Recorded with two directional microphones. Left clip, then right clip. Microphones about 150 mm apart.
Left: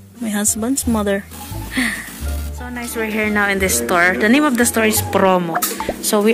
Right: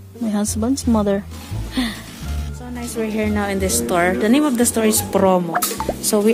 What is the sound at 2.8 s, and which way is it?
A woman's voice, 10° right (ahead or behind).